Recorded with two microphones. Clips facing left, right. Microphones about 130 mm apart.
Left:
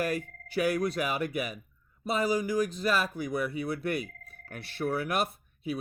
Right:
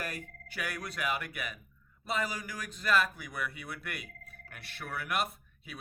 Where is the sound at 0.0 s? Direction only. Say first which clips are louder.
Left 10 dB; 35° left (ahead or behind).